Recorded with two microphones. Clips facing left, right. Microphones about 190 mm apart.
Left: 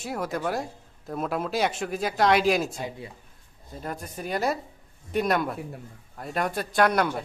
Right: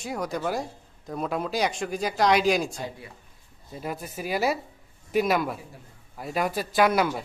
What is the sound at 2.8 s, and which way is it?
Speech, 20° left (ahead or behind).